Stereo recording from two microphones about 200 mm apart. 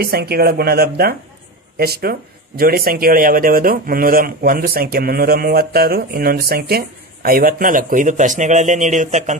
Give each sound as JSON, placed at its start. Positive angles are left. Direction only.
{"t": 0.0, "sound": "speech", "side_deg": -50}